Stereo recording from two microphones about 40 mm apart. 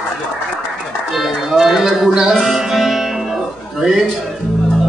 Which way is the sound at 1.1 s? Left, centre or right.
Centre.